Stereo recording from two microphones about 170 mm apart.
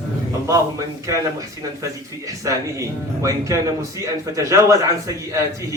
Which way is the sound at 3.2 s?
20° right (ahead or behind).